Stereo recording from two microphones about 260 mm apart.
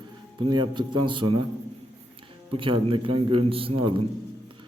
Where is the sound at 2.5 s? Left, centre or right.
Centre.